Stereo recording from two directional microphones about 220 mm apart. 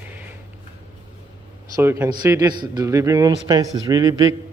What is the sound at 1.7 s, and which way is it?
Speech, 10° right (ahead or behind).